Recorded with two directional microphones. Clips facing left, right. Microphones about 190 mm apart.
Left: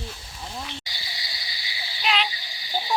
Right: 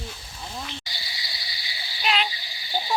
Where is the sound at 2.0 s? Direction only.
Centre (ahead or behind).